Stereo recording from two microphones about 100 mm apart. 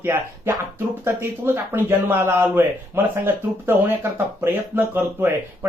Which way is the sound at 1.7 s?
20° right (ahead or behind).